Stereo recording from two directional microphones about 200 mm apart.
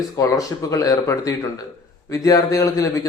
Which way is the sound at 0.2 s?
15° left (ahead or behind).